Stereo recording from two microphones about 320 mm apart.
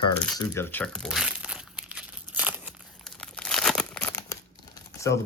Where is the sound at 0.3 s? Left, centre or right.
Centre.